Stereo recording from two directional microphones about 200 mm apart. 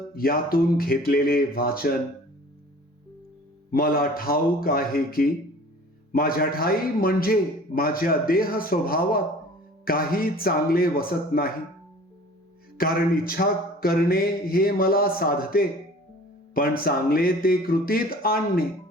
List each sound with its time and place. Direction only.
0.1 s a man's voice: 45° left (ahead or behind)
3.7 s a man's voice: 45° left (ahead or behind)
12.7 s a man's voice: 45° left (ahead or behind)